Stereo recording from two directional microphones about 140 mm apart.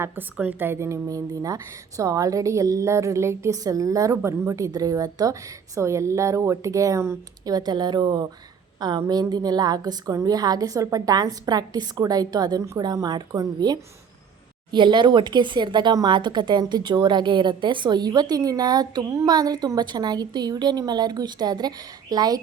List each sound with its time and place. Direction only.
0.0 s a woman's voice: 10° right (ahead or behind); by 22.4 s 30° right (ahead or behind)